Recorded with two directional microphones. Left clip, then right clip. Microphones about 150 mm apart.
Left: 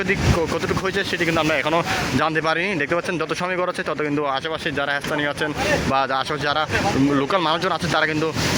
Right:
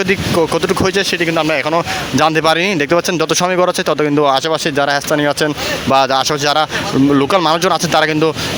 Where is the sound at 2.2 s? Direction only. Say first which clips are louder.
Right 11 dB; 40° right (ahead or behind).